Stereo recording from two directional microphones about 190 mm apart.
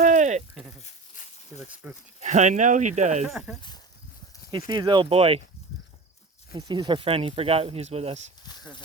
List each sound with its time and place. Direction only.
0.0 s a sound: 40° right (ahead or behind)
0.8 s a sound: 35° left (ahead or behind)
1.8 s speech: 10° right (ahead or behind)
2.2 s speech: 40° right (ahead or behind)
3.2 s speech: centre (ahead or behind)
4.5 s speech: 25° right (ahead or behind)
6.5 s speech: 20° right (ahead or behind)
8.4 s speech: 20° left (ahead or behind)